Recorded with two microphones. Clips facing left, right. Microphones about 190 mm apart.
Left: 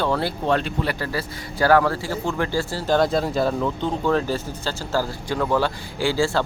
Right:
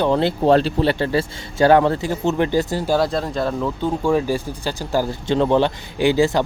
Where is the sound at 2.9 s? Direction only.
Centre (ahead or behind); by 6.4 s 20° right (ahead or behind).